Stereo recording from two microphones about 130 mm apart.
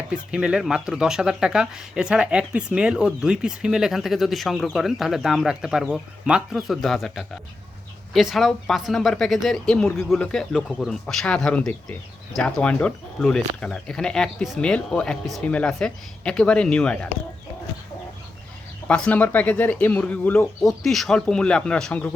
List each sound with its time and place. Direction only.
0.1 s speech: 5° right (ahead or behind)
18.9 s speech: 10° left (ahead or behind)